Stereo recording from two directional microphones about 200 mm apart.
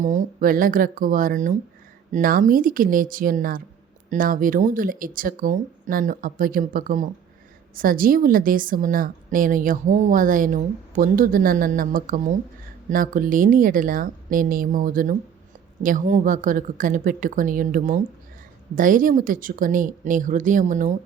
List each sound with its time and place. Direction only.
0.0 s a woman's voice: 40° right (ahead or behind)